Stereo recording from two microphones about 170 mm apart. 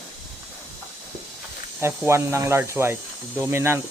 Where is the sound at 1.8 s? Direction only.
15° right (ahead or behind).